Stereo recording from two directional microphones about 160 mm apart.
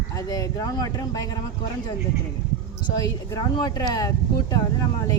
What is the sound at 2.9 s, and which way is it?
Speech, 25° left (ahead or behind).